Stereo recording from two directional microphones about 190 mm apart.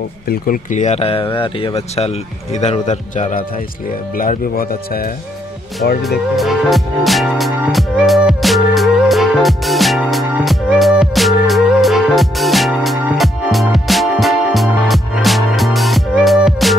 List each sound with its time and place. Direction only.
0.3 s speech: 45° left (ahead or behind)
6.0 s music: centre (ahead or behind)